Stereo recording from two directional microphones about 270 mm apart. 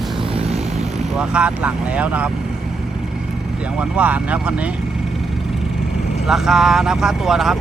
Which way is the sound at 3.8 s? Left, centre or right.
Centre.